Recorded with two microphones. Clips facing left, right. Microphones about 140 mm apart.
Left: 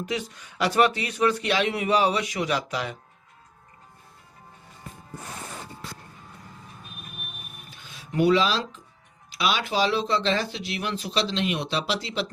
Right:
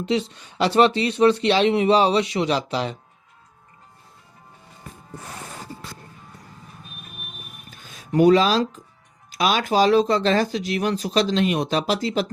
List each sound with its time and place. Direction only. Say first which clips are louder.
0.0 s speech: right 7 dB; 25° right (ahead or behind)
7.7 s a sound: right 10 dB; 45° right (ahead or behind)
9.3 s speech: right 5 dB; 45° right (ahead or behind)